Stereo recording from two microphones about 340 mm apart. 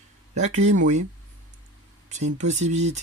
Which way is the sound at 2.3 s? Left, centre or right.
Right.